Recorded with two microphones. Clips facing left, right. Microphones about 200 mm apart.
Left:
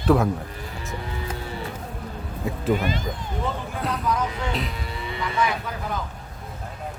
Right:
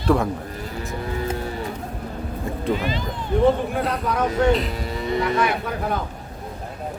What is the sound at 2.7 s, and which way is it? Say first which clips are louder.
Speech: even; 50° left (ahead or behind).